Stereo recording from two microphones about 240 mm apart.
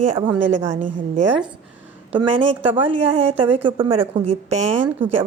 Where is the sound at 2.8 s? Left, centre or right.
Right.